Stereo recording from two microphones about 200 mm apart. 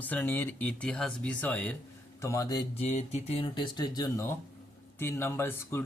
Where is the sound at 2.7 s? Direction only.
30° left (ahead or behind).